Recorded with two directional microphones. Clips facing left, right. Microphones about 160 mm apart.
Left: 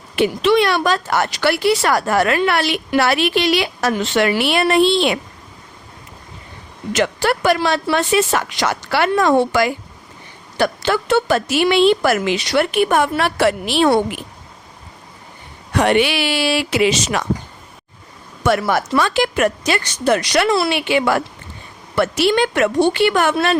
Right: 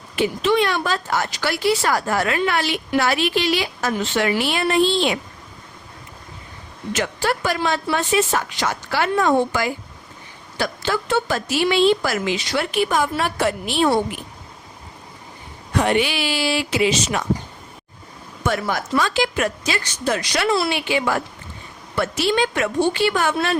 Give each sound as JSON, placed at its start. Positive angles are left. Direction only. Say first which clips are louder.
{"t": 0.2, "sound": "speech", "louder": "left 4 dB", "side_deg": 75}
{"t": 6.9, "sound": "speech", "louder": "left 5 dB", "side_deg": 75}
{"t": 15.7, "sound": "speech", "louder": "left 4 dB", "side_deg": 70}
{"t": 18.4, "sound": "speech", "louder": "left 6 dB", "side_deg": 75}